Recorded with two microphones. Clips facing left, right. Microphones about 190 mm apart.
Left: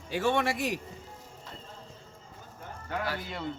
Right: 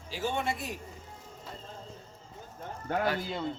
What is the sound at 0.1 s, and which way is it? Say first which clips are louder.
Speech: left 5 dB; 75° left (ahead or behind).